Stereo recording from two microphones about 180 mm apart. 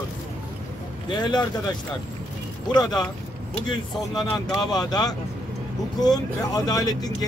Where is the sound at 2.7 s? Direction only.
20° left (ahead or behind).